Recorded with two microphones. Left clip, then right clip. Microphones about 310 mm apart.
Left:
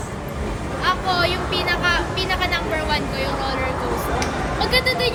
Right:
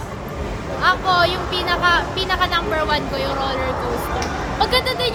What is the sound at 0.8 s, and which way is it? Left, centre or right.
Speech, centre.